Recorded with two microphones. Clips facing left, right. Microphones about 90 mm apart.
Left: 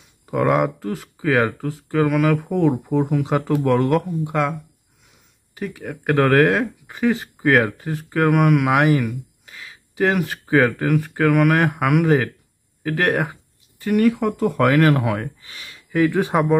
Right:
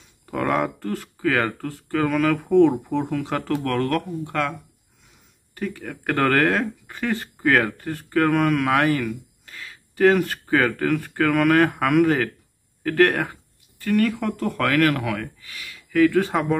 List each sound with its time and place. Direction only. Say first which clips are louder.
0.3 s speech: left 4 dB; 5° left (ahead or behind)